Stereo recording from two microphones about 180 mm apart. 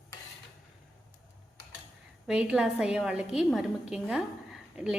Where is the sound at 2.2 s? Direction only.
5° right (ahead or behind).